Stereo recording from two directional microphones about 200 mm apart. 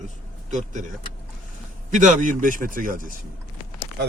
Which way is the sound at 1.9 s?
40° right (ahead or behind).